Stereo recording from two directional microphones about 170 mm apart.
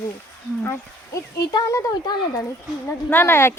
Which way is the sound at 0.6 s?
15° left (ahead or behind).